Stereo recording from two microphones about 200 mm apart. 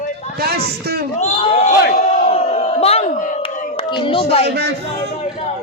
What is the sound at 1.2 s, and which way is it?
Crowd, 35° left (ahead or behind).